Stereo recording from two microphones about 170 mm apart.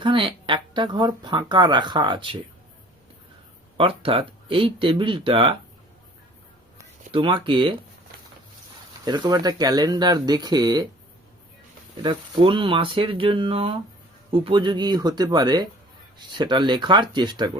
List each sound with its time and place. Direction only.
0.0 s speech: 30° right (ahead or behind)
3.8 s speech: 30° right (ahead or behind)
7.1 s speech: 30° right (ahead or behind)
9.0 s speech: 25° right (ahead or behind)
12.0 s speech: 30° right (ahead or behind)